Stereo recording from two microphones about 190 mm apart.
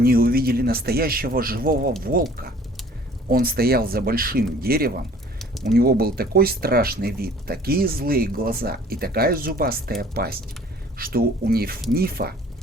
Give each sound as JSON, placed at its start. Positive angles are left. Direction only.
{"t": 0.0, "sound": "speech", "side_deg": -50}
{"t": 3.2, "sound": "speech", "side_deg": -50}
{"t": 5.4, "sound": "a sound", "side_deg": 0}
{"t": 5.7, "sound": "speech", "side_deg": -55}